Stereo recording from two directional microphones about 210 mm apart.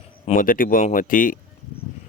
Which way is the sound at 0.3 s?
40° left (ahead or behind).